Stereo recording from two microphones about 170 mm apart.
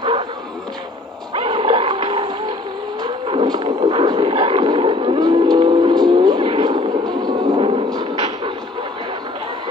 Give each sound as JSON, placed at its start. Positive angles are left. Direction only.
{"t": 1.3, "sound": "dog", "side_deg": -30}
{"t": 3.0, "sound": "vehicle", "side_deg": -25}